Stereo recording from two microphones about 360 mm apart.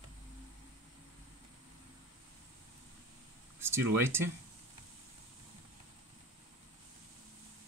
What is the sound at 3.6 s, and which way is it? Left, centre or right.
Speech, centre.